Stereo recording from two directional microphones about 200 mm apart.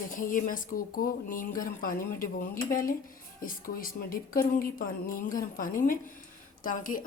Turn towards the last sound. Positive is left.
turn(degrees=45)  # may be behind; listen again after turning